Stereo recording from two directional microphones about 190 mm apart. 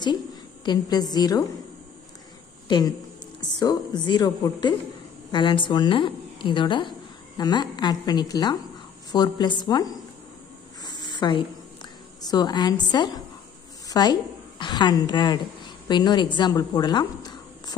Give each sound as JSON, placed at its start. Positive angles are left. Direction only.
{"t": 0.7, "sound": "a woman's voice", "side_deg": 20}
{"t": 3.3, "sound": "a woman's voice", "side_deg": 20}
{"t": 10.8, "sound": "a sound", "side_deg": 20}
{"t": 14.6, "sound": "a woman's voice", "side_deg": 25}